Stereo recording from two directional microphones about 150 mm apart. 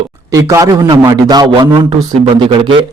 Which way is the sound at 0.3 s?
20° right (ahead or behind).